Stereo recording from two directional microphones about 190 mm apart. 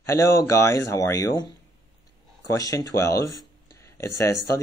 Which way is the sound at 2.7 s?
15° left (ahead or behind).